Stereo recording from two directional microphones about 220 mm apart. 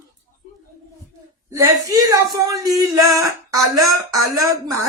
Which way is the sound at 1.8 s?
15° right (ahead or behind).